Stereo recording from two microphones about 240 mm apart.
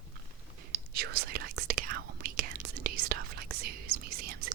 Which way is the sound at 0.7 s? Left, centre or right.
Right.